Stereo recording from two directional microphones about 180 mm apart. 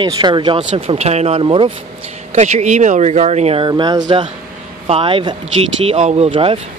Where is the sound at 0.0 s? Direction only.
25° right (ahead or behind).